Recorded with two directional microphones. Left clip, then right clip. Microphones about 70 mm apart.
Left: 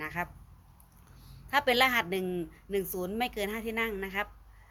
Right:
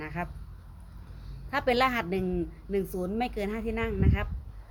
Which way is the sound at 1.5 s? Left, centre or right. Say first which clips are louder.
Even; centre.